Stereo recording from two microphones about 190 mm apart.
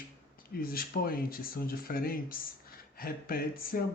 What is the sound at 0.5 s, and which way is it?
Speech, 50° left (ahead or behind).